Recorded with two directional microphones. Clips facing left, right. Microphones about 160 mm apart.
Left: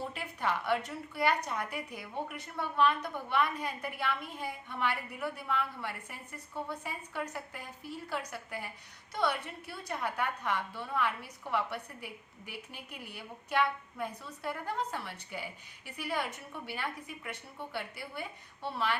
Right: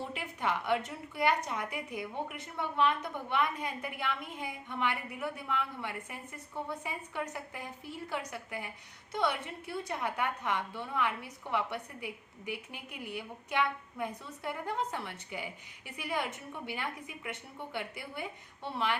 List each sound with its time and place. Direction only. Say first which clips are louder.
0.1 s a woman's voice: even; 20° right (ahead or behind)